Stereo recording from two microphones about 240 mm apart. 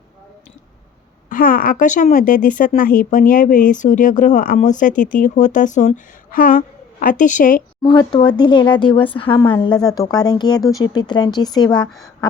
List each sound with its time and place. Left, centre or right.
1.3 s a woman's voice: left
7.8 s speech: centre